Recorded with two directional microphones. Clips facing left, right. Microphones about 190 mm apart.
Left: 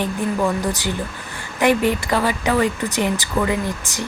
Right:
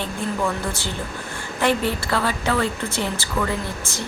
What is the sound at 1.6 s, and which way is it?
A woman's voice, 15° left (ahead or behind).